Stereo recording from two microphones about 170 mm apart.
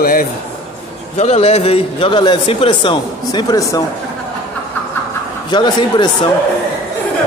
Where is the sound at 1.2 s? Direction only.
40° left (ahead or behind).